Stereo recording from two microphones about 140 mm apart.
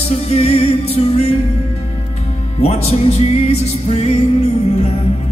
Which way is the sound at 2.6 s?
45° left (ahead or behind).